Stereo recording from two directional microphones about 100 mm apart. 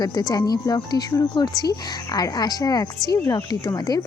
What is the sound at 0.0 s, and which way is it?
Speech, 40° left (ahead or behind).